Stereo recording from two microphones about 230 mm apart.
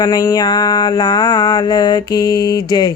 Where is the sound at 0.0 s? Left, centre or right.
Centre.